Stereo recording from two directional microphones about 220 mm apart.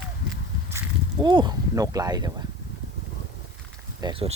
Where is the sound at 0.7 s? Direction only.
15° right (ahead or behind).